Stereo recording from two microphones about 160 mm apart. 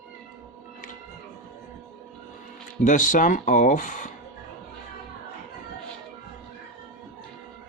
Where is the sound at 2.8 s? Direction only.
55° left (ahead or behind).